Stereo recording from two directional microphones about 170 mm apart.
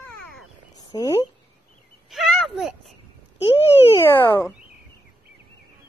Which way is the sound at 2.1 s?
Centre (ahead or behind).